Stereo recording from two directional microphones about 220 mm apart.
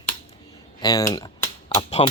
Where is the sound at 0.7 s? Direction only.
20° left (ahead or behind).